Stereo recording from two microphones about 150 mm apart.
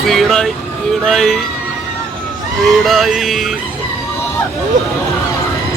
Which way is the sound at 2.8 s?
Centre (ahead or behind).